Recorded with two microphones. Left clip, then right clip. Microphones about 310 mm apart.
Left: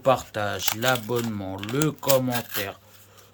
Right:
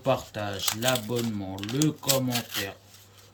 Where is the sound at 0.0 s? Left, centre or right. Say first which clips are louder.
Left 5 dB; centre.